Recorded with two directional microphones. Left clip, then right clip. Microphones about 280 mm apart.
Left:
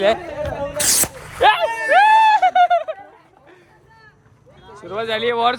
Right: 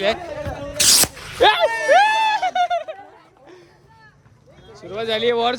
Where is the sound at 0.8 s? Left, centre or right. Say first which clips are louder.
Right 7 dB; centre.